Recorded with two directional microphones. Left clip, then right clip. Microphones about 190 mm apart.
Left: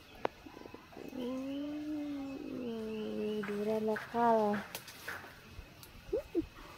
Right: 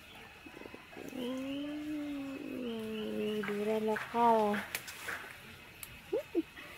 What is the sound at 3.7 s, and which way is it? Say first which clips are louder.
Speech: right 1 dB; 5° right (ahead or behind).